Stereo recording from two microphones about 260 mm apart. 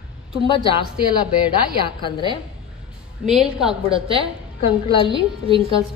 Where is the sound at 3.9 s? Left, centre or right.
Right.